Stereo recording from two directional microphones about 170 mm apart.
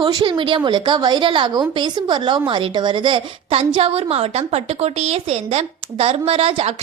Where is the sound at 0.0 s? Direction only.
25° right (ahead or behind).